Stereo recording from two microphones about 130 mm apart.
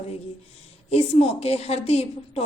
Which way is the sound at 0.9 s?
50° left (ahead or behind).